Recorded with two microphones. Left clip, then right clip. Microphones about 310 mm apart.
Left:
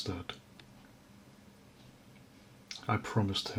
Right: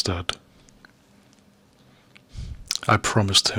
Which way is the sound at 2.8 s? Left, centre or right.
Right.